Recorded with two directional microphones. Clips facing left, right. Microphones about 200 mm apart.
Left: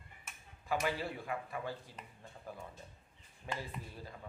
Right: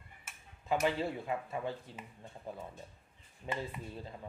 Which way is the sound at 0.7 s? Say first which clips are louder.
Right 4 dB; 25° right (ahead or behind).